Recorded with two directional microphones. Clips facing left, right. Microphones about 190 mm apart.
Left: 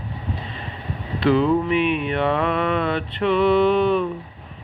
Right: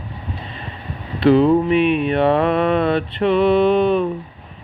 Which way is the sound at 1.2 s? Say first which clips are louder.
Right 5 dB; 25° right (ahead or behind).